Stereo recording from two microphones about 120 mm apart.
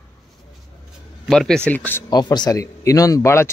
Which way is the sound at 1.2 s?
5° left (ahead or behind).